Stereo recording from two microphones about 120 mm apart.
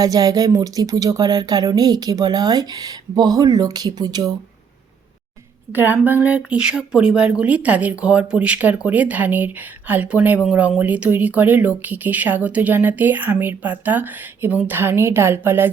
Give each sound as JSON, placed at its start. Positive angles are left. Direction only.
{"t": 0.0, "sound": "speech", "side_deg": -30}
{"t": 5.7, "sound": "speech", "side_deg": -15}